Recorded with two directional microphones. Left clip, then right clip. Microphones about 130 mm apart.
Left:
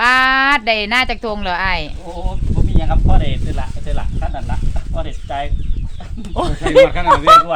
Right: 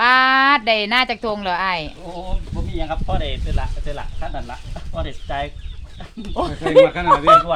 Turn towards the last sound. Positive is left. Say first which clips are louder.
# left 3 dB
turn(degrees=20)  # may be behind; listen again after turning